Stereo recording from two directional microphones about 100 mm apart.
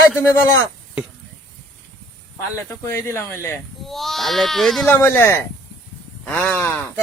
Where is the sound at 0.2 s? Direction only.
30° left (ahead or behind).